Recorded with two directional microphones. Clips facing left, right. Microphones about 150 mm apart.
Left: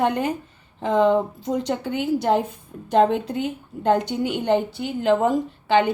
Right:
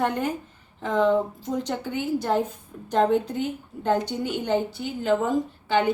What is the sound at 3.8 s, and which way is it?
A woman's voice, 65° left (ahead or behind).